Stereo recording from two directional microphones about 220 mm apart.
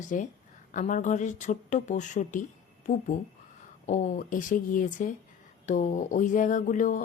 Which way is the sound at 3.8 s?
35° left (ahead or behind).